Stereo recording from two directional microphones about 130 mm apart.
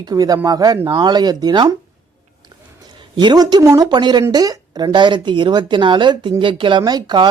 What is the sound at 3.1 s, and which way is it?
Speech, 35° right (ahead or behind).